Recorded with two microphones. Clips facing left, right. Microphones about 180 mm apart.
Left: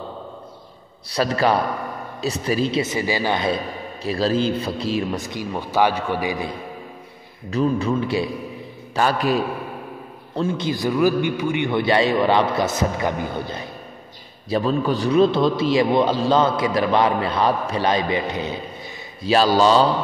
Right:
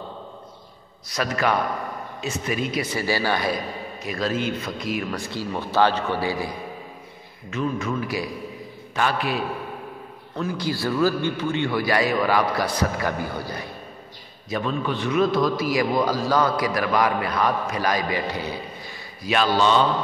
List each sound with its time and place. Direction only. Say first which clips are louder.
1.0 s a man's voice: left 4 dB; 30° left (ahead or behind)
7.5 s a man's voice: left 5 dB; 35° left (ahead or behind)
8.9 s a man's voice: left 4 dB; 40° left (ahead or behind)
10.3 s a man's voice: left 4 dB; 25° left (ahead or behind)
14.5 s a man's voice: left 5 dB; 35° left (ahead or behind)
19.2 s a man's voice: left 4 dB; 35° left (ahead or behind)